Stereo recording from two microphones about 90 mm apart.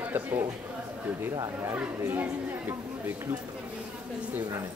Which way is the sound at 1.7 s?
20° right (ahead or behind).